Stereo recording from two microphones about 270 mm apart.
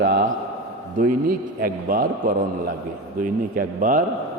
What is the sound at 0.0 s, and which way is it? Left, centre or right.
Speech, right.